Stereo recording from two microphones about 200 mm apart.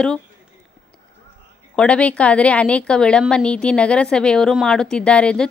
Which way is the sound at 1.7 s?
5° left (ahead or behind).